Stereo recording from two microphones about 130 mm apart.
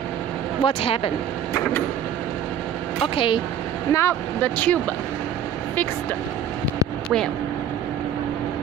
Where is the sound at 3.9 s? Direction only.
20° left (ahead or behind).